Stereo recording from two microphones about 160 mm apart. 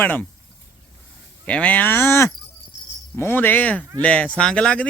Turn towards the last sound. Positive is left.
turn(degrees=5)  # may be behind; listen again after turning